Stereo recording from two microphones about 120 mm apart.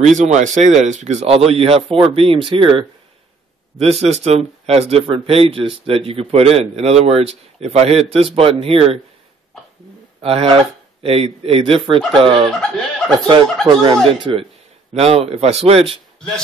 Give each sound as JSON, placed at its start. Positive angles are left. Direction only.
{"t": 0.0, "sound": "speech", "side_deg": -90}
{"t": 3.8, "sound": "speech", "side_deg": -60}
{"t": 10.2, "sound": "speech", "side_deg": -55}
{"t": 12.4, "sound": "chicken", "side_deg": 5}
{"t": 13.7, "sound": "speech", "side_deg": -40}
{"t": 15.0, "sound": "speech", "side_deg": -55}